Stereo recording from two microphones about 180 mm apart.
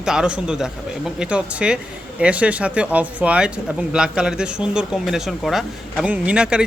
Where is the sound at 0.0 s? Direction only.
5° right (ahead or behind).